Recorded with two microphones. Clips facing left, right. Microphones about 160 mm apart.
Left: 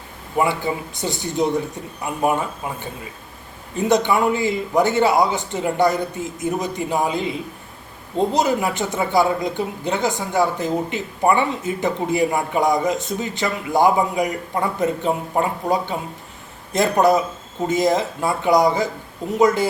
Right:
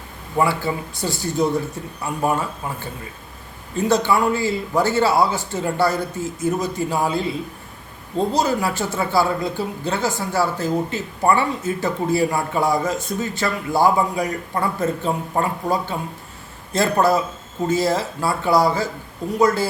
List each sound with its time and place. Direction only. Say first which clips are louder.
0.3 s speech: even; 20° left (ahead or behind)